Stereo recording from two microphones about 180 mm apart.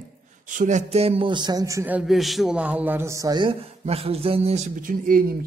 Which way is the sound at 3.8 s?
35° right (ahead or behind).